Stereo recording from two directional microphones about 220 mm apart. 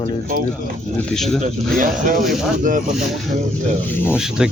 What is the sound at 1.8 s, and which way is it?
Speech, 35° right (ahead or behind).